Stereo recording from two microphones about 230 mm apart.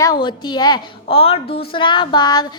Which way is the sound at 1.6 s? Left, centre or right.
Left.